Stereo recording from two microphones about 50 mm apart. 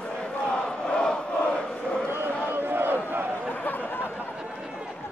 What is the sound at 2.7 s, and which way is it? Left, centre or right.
Crowd, right.